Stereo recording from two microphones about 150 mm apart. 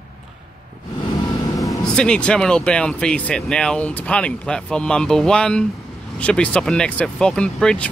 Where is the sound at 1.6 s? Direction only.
5° left (ahead or behind).